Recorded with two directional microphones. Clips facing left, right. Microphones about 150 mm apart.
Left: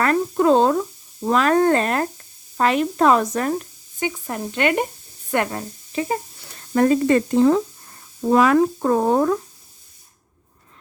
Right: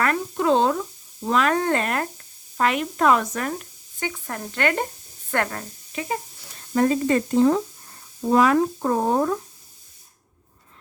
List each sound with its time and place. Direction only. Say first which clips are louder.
0.0 s a sound: left 5 dB; 35° left (ahead or behind)
1.2 s speech: left 4 dB; 35° left (ahead or behind)
4.0 s speech: left 5 dB; 20° left (ahead or behind)
6.7 s speech: left 4 dB; 80° left